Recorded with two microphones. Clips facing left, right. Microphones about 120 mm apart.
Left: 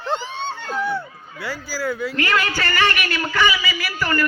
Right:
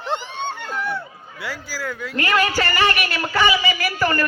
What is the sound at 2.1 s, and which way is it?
A woman's voice, 35° right (ahead or behind).